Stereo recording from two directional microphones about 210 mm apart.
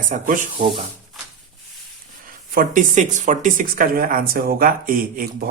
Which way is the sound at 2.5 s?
40° right (ahead or behind).